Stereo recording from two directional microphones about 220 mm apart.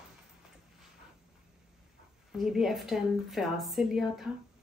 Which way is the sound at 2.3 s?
Centre (ahead or behind).